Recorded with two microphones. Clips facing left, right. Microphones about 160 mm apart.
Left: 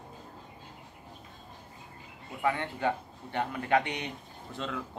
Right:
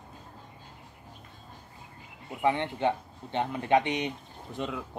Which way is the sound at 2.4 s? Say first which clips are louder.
Right 3 dB; 20° right (ahead or behind).